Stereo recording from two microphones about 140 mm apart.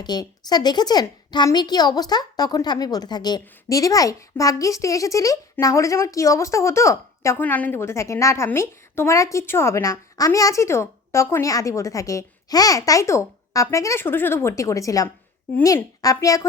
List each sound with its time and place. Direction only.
0.0 s a woman's voice: 30° left (ahead or behind)